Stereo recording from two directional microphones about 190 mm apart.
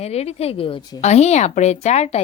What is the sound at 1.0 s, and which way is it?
Speech, 35° left (ahead or behind).